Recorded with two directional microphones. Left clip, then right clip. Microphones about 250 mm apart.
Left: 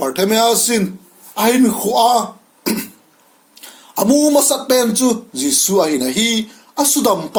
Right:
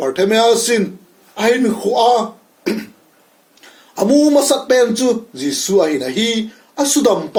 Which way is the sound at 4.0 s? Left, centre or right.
Left.